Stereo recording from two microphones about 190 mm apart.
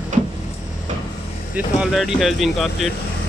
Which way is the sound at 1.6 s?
5° right (ahead or behind).